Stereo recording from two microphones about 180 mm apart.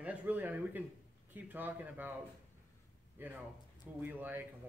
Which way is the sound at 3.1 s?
10° right (ahead or behind).